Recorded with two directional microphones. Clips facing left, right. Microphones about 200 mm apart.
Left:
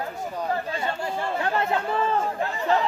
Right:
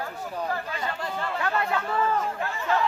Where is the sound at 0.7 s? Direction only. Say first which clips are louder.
Left 3 dB; 30° left (ahead or behind).